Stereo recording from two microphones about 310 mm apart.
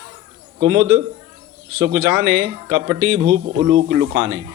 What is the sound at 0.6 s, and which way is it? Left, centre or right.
Speech, right.